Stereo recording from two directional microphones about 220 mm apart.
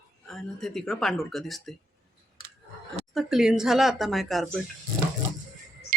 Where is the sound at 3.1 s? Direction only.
Centre (ahead or behind).